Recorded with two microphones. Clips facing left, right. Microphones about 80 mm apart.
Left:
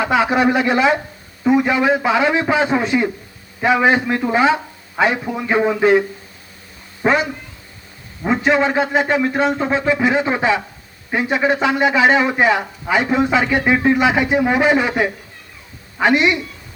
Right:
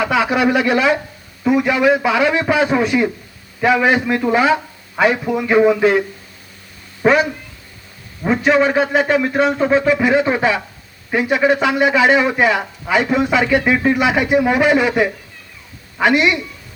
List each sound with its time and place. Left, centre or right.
0.0 s a man's voice: left
8.3 s a man's voice: left